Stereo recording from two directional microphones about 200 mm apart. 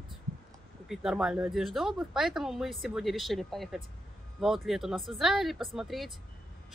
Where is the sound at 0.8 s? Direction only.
5° right (ahead or behind).